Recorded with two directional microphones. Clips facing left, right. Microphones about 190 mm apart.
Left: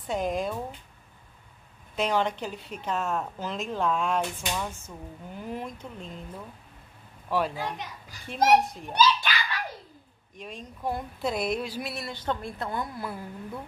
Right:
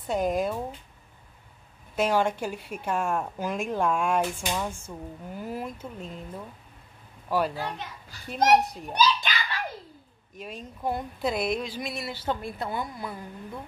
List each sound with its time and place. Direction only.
0.0 s a woman's voice: centre (ahead or behind)
2.0 s a woman's voice: 10° right (ahead or behind)
10.3 s a woman's voice: 5° right (ahead or behind)
11.5 s a woman's voice: 10° left (ahead or behind)